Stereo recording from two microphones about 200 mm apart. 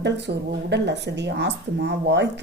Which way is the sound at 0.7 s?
60° right (ahead or behind).